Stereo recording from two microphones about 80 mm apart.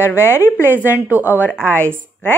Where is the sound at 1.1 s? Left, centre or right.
Right.